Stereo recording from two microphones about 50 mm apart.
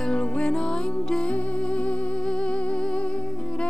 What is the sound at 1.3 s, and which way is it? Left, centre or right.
Music, left.